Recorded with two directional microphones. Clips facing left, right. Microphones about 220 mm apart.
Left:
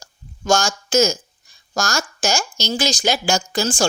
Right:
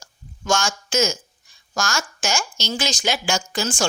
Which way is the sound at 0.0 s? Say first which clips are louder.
Left 4 dB; 35° left (ahead or behind).